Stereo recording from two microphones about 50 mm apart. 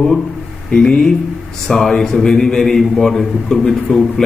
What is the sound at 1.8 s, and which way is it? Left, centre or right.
Speech, centre.